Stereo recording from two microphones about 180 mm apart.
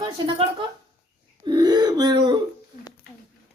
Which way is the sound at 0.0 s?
25° right (ahead or behind).